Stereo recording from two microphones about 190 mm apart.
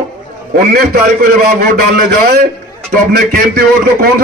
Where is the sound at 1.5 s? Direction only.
50° right (ahead or behind).